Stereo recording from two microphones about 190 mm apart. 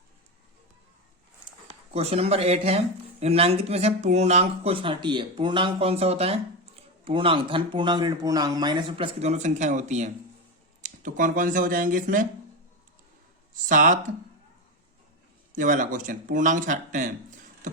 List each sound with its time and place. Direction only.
1.6 s speech: 30° right (ahead or behind)
13.5 s speech: 45° right (ahead or behind)
15.5 s speech: 45° right (ahead or behind)